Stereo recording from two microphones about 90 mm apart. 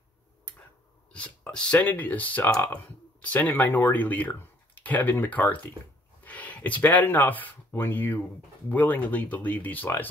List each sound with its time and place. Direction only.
1.1 s speech: 15° left (ahead or behind)